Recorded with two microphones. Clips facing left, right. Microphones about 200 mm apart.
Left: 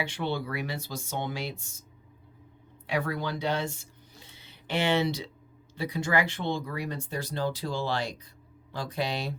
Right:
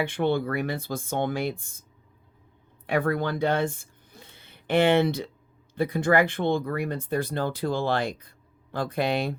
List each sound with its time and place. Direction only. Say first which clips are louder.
0.0 s speech: right 7 dB; 55° right (ahead or behind)
2.8 s speech: right 5 dB; 55° right (ahead or behind)